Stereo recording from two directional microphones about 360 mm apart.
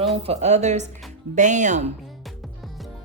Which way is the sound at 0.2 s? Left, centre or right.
Centre.